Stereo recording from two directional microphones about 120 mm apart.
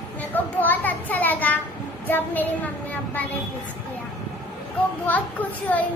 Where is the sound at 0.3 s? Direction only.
15° left (ahead or behind).